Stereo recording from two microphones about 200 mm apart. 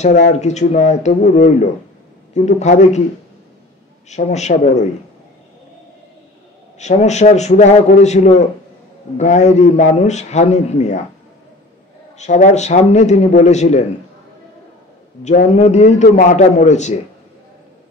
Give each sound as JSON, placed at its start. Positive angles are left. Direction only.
{"t": 0.4, "sound": "a man's voice", "side_deg": 35}
{"t": 4.1, "sound": "a man's voice", "side_deg": 35}
{"t": 6.8, "sound": "a man's voice", "side_deg": 35}
{"t": 12.2, "sound": "a man's voice", "side_deg": 35}
{"t": 15.2, "sound": "a man's voice", "side_deg": 35}